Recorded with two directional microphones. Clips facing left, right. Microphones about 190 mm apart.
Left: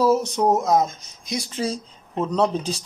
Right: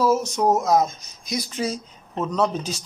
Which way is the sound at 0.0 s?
35° left (ahead or behind).